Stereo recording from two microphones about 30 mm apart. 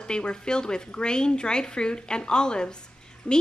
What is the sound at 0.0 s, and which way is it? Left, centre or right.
Speech, left.